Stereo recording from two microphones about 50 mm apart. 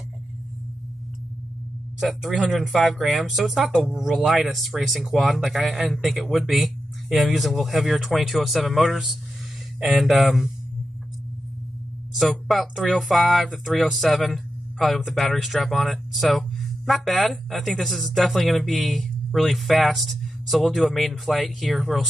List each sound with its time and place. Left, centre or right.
2.0 s speech: centre
6.2 s speech: centre
10.0 s speech: centre
12.2 s speech: centre
12.7 s speech: centre
13.1 s speech: centre